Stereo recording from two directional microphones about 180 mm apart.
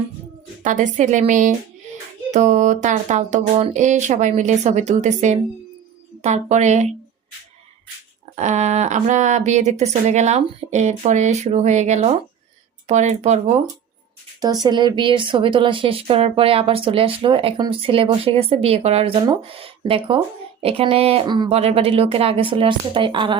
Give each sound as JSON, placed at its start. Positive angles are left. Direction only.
{"t": 0.6, "sound": "speech", "side_deg": -45}
{"t": 8.4, "sound": "speech", "side_deg": -40}
{"t": 14.4, "sound": "speech", "side_deg": -20}